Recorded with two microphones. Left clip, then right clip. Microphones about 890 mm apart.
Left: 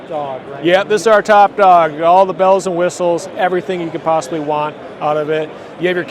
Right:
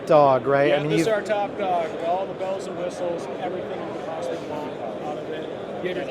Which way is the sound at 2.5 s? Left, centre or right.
Left.